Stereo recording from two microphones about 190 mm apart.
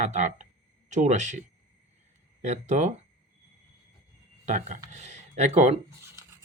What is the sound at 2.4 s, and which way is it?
Speech, 35° right (ahead or behind).